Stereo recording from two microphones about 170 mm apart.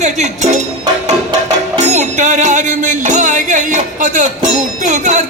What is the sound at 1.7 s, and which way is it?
Music, 45° right (ahead or behind).